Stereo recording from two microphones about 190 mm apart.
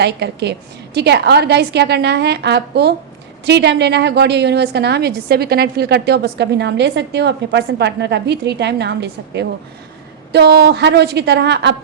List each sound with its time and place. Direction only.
0.0 s a woman's voice: 60° right (ahead or behind)